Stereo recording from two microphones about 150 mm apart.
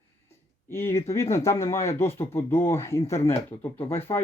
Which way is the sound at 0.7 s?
15° left (ahead or behind).